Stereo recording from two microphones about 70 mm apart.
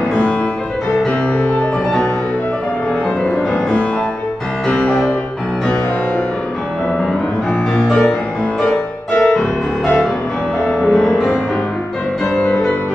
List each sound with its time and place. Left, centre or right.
4.6 s music: centre
8.6 s music: left
10.7 s music: centre